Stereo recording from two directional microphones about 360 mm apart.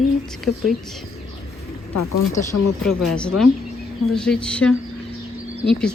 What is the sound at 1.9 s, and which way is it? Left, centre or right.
Speech, left.